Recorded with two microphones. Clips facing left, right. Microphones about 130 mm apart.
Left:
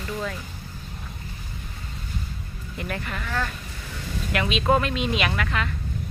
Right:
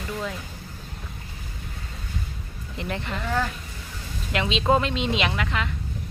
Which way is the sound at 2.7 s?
25° right (ahead or behind).